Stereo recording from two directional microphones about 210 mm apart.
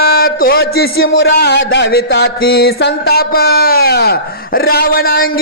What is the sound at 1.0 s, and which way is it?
Speech, 65° left (ahead or behind).